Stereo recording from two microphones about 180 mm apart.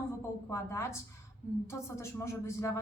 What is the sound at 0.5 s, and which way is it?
Speech, 15° left (ahead or behind).